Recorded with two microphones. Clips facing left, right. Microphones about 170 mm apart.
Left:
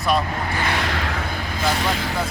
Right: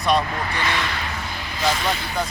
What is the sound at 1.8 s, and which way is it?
Speech, 90° left.